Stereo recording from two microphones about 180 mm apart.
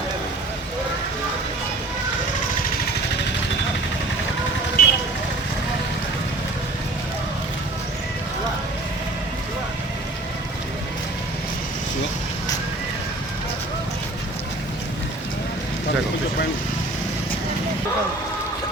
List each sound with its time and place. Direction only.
4.8 s vehicle: 55° left (ahead or behind)